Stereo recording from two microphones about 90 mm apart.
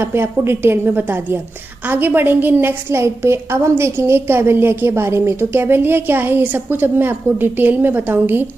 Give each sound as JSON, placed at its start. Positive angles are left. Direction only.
{"t": 0.0, "sound": "a woman's voice", "side_deg": -25}